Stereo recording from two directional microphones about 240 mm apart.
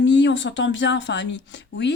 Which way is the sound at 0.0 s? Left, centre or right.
Left.